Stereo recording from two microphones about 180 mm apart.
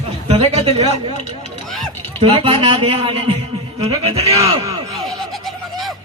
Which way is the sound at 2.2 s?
30° right (ahead or behind).